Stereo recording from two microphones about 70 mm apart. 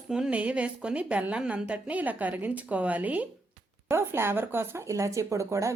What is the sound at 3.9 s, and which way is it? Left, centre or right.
Speech, right.